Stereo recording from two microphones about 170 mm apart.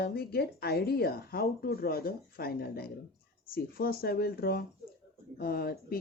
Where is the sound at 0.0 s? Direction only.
65° left (ahead or behind).